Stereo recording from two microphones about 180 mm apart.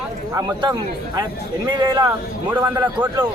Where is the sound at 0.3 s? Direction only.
20° right (ahead or behind).